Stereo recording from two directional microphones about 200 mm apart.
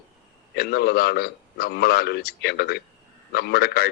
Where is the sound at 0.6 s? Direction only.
50° left (ahead or behind).